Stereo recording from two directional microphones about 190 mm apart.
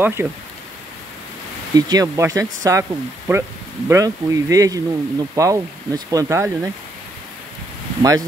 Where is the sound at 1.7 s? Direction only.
20° right (ahead or behind).